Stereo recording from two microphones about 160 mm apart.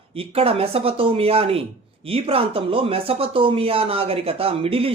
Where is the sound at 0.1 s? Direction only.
35° right (ahead or behind).